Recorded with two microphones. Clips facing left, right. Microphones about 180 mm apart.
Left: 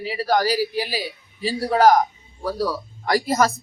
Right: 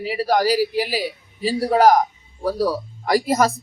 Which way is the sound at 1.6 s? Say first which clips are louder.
Right 1 dB; 10° right (ahead or behind).